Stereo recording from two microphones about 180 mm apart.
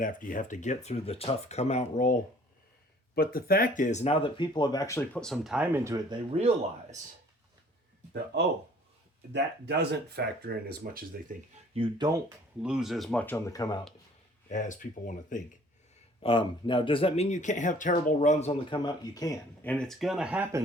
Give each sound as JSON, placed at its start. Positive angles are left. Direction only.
{"t": 0.0, "sound": "speech", "side_deg": 50}
{"t": 3.2, "sound": "speech", "side_deg": 55}
{"t": 9.3, "sound": "speech", "side_deg": -65}
{"t": 11.7, "sound": "speech", "side_deg": -30}
{"t": 12.6, "sound": "speech", "side_deg": -5}
{"t": 13.4, "sound": "speech", "side_deg": 20}
{"t": 14.5, "sound": "speech", "side_deg": 45}
{"t": 16.2, "sound": "speech", "side_deg": 25}
{"t": 18.9, "sound": "speech", "side_deg": 20}
{"t": 19.6, "sound": "speech", "side_deg": 5}